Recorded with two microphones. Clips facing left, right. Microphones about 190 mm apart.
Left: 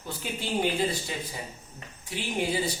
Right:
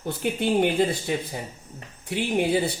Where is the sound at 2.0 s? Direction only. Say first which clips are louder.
Right 6 dB; 60° right (ahead or behind).